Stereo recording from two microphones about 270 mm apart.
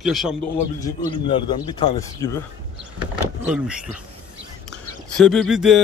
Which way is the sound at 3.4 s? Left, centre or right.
Centre.